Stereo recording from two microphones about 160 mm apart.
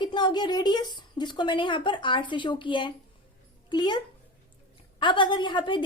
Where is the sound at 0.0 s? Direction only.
30° left (ahead or behind).